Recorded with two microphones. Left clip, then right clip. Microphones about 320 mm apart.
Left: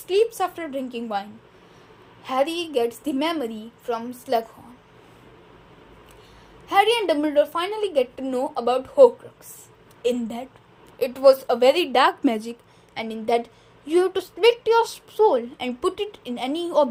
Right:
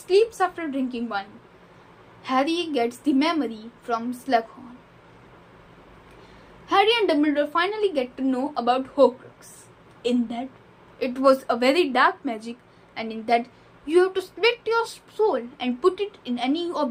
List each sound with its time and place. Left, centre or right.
0.1 s a woman's voice: left
2.2 s a woman's voice: left
6.7 s a woman's voice: left